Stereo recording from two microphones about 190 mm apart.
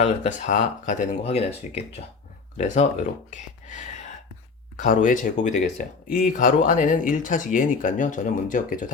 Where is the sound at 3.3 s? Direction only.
40° left (ahead or behind).